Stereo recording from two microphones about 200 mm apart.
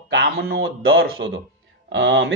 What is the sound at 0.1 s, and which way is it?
Speech, 60° right (ahead or behind).